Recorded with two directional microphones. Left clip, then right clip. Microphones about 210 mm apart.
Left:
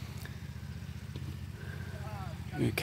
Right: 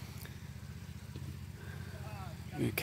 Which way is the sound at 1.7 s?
10° left (ahead or behind).